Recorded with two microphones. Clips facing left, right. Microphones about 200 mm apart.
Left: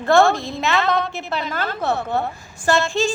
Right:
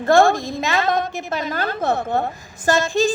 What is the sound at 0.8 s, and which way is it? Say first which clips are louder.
Speech: even; 45° right (ahead or behind).